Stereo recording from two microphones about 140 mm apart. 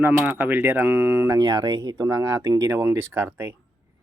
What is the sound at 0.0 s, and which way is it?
Speech, 15° right (ahead or behind).